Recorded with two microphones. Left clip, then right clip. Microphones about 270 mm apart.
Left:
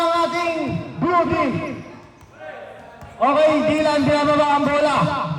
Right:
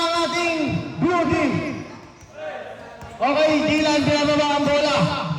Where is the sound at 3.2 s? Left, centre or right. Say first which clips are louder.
Left 3 dB; left.